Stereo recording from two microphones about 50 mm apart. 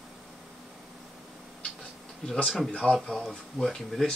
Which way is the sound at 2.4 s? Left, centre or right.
Centre.